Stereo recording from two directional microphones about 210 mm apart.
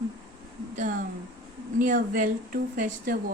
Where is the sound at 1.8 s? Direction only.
40° right (ahead or behind).